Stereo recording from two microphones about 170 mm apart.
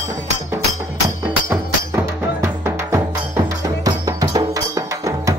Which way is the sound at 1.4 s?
15° right (ahead or behind).